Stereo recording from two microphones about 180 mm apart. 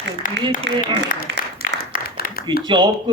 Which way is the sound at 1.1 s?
55° left (ahead or behind).